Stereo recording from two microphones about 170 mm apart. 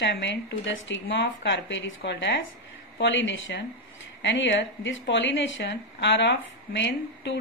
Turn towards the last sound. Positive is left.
turn(degrees=90)